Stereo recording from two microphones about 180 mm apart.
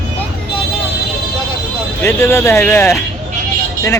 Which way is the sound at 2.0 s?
15° left (ahead or behind).